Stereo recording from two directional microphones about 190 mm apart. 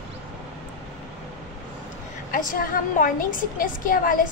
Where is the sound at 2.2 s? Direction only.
45° left (ahead or behind).